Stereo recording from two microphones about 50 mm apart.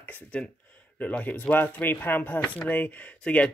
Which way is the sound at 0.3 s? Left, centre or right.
Left.